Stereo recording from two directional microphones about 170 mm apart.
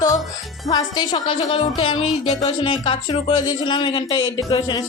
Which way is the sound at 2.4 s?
30° left (ahead or behind).